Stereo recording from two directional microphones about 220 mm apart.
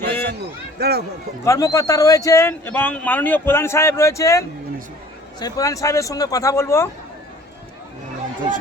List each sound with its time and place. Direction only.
0.1 s a sound: 10° left (ahead or behind)
0.8 s speech: 45° right (ahead or behind)
1.5 s speech: 15° left (ahead or behind)